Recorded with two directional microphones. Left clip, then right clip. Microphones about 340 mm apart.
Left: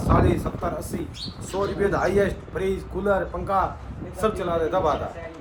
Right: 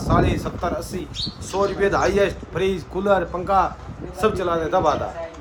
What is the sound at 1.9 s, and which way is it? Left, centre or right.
A man's voice, centre.